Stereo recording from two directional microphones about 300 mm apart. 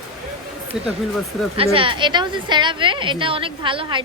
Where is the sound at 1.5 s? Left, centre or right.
Centre.